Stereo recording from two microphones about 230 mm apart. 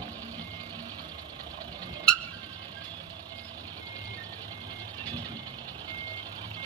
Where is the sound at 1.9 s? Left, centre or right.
Centre.